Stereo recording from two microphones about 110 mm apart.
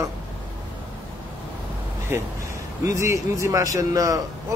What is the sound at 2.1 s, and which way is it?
Speech, 25° right (ahead or behind).